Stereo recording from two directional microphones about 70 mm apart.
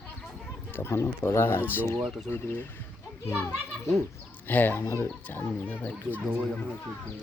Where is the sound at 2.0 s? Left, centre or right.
Centre.